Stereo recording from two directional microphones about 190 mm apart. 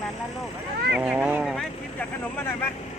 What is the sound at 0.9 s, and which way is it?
Vehicle, 5° right (ahead or behind).